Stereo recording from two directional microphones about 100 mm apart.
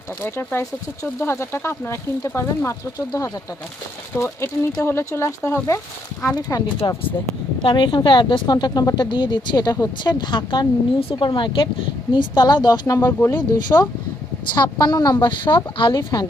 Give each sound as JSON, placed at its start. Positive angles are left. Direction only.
{"t": 0.2, "sound": "speech", "side_deg": 25}
{"t": 3.1, "sound": "speech", "side_deg": 35}
{"t": 4.1, "sound": "speech", "side_deg": 25}
{"t": 6.3, "sound": "a woman's voice", "side_deg": 45}
{"t": 7.6, "sound": "a woman's voice", "side_deg": 55}
{"t": 9.0, "sound": "a woman's voice", "side_deg": 50}
{"t": 13.0, "sound": "speech", "side_deg": 25}
{"t": 13.3, "sound": "a woman's voice", "side_deg": 45}